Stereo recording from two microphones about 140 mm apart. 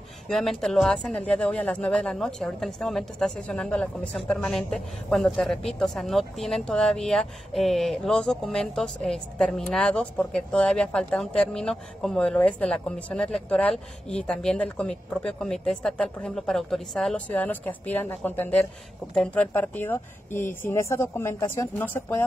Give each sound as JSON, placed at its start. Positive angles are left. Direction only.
{"t": 0.3, "sound": "speech", "side_deg": 0}